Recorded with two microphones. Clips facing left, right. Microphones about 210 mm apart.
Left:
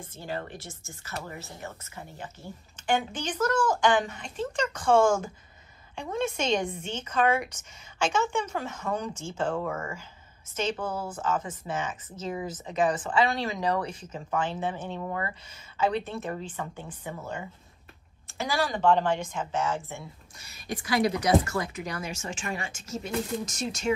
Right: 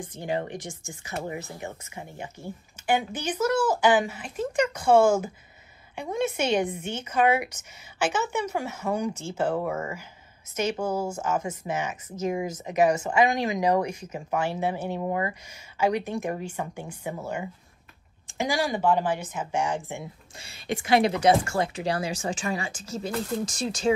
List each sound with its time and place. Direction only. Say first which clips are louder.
0.0 s a woman's voice: right 6 dB; 15° right (ahead or behind)
20.3 s a woman's voice: right 5 dB; 25° right (ahead or behind)